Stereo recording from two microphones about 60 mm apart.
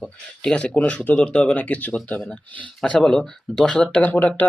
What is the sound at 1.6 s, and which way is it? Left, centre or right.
Speech, left.